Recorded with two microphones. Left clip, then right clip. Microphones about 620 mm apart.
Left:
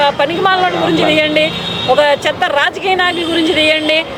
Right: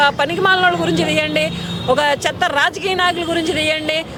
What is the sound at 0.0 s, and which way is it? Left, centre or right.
Speech, right.